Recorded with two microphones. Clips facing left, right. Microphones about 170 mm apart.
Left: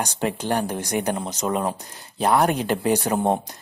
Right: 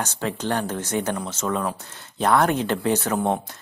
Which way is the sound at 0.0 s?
15° left (ahead or behind).